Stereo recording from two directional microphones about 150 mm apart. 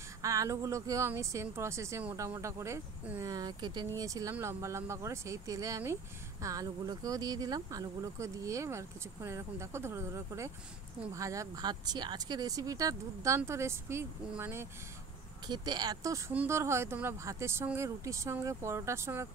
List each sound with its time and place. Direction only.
0.2 s speech: 20° right (ahead or behind)
15.4 s speech: 30° right (ahead or behind)